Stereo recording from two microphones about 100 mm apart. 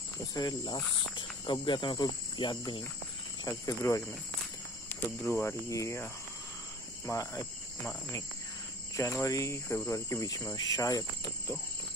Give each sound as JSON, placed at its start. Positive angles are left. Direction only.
{"t": 0.3, "sound": "speech", "side_deg": 40}
{"t": 0.7, "sound": "cricket", "side_deg": 50}
{"t": 3.4, "sound": "speech", "side_deg": 35}
{"t": 5.3, "sound": "speech", "side_deg": 25}
{"t": 7.1, "sound": "speech", "side_deg": 30}
{"t": 8.9, "sound": "speech", "side_deg": 30}